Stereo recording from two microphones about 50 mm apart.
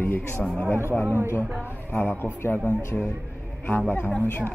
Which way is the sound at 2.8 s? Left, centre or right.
Left.